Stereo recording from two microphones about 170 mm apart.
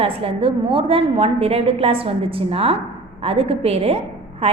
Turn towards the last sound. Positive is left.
turn(degrees=-35)  # may be behind; listen again after turning